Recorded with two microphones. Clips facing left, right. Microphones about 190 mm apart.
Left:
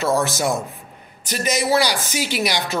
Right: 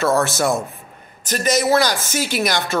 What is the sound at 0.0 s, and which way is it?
Speech, 15° left (ahead or behind).